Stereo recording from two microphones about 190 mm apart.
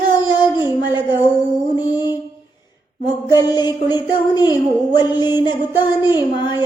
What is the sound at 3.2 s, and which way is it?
Music, 20° left (ahead or behind).